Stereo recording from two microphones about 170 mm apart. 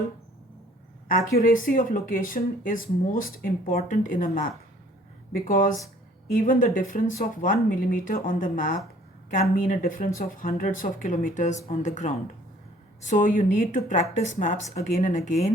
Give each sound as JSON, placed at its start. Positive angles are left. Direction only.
{"t": 1.0, "sound": "speech", "side_deg": 55}